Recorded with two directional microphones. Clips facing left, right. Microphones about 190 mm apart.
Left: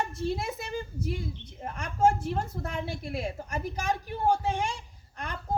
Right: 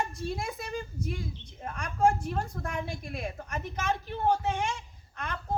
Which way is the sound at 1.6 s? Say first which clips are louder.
Left 1 dB; 25° left (ahead or behind).